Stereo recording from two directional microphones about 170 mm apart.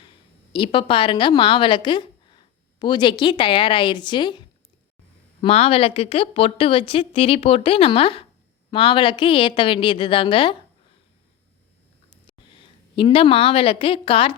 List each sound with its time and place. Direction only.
0.5 s a woman's voice: 30° left (ahead or behind)
13.0 s a woman's voice: 30° left (ahead or behind)